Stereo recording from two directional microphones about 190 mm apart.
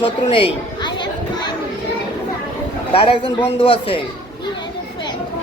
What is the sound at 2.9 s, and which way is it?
Speech, 25° left (ahead or behind).